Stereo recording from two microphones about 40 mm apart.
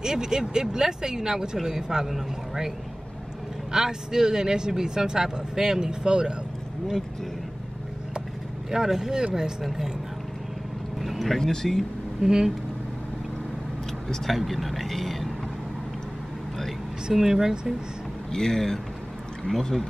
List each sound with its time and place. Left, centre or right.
0.0 s speech: centre
3.7 s speech: centre
8.6 s speech: centre
11.0 s vehicle: centre
11.3 s speech: centre
12.2 s speech: centre
14.0 s speech: centre
17.1 s speech: centre
18.3 s speech: centre